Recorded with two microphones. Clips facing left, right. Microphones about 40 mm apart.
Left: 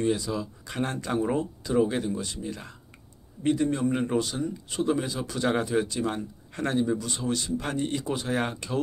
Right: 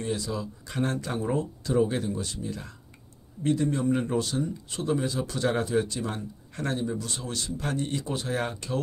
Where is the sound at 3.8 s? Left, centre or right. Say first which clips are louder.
Even; left.